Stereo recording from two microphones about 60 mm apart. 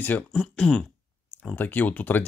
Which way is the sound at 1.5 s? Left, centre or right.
Left.